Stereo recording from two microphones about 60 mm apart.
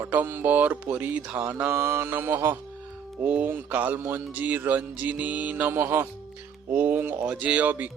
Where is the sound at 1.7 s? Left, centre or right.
Right.